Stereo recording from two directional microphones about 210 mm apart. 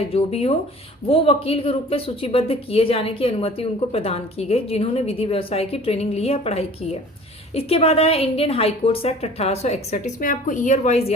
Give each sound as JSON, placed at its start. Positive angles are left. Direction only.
{"t": 0.1, "sound": "speech", "side_deg": 30}